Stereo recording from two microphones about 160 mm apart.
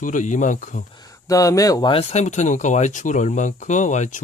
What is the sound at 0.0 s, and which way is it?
Speech, 55° left (ahead or behind).